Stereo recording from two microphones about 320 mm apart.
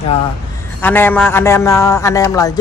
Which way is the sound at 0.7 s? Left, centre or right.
Centre.